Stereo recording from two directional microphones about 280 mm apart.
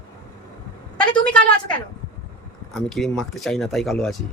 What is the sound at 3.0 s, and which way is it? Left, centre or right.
Speech, centre.